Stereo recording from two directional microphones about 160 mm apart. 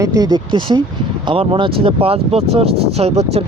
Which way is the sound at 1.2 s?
35° right (ahead or behind).